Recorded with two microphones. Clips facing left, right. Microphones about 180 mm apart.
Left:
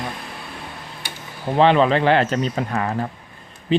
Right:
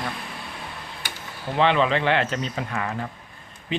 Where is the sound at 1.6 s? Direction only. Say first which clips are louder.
Left 5 dB; 40° left (ahead or behind).